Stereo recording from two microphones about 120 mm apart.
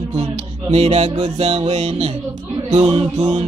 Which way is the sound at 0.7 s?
60° right (ahead or behind).